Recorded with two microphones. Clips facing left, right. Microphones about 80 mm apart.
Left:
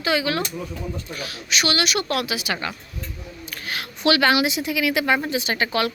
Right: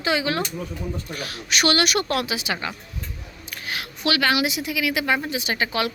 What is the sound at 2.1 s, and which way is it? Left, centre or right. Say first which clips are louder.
Speech: even; right.